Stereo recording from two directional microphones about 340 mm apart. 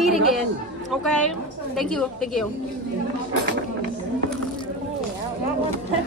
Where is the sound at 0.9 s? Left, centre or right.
Centre.